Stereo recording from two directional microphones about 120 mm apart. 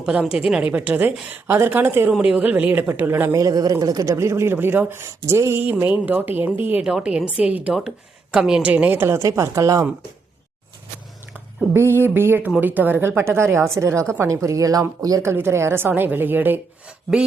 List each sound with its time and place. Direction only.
0.0 s a woman's voice: 10° right (ahead or behind); by 9.8 s 25° right (ahead or behind)
11.7 s a woman's voice: 20° right (ahead or behind)